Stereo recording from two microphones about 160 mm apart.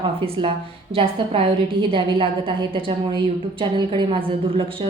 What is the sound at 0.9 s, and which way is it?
Speech, 35° right (ahead or behind).